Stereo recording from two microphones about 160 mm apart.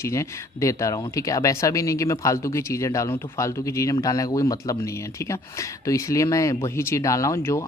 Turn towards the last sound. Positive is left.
turn(degrees=15)  # may be behind; listen again after turning